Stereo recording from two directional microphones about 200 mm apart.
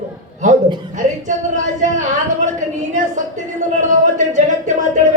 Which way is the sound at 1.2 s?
40° right (ahead or behind).